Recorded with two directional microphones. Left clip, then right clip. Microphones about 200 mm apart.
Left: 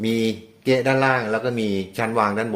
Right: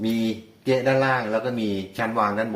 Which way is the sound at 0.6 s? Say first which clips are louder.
Left 2 dB; 65° left (ahead or behind).